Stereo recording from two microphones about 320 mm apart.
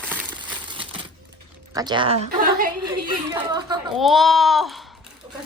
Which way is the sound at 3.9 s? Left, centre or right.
Centre.